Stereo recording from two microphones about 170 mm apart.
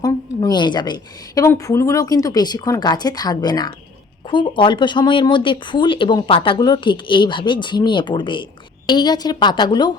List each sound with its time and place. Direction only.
0.0 s a woman's voice: 25° left (ahead or behind)